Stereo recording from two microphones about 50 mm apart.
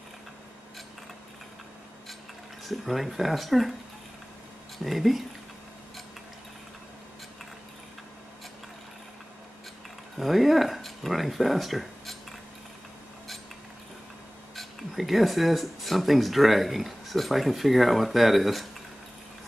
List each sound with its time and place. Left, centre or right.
2.6 s speech: centre
4.7 s speech: centre
10.1 s speech: centre
14.5 s speech: centre